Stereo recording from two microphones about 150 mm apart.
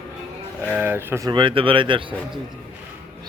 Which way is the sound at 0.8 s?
15° right (ahead or behind).